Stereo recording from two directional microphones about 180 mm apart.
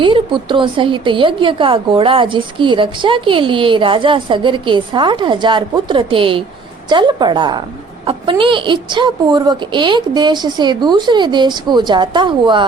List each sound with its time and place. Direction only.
0.0 s a woman's voice: 25° right (ahead or behind)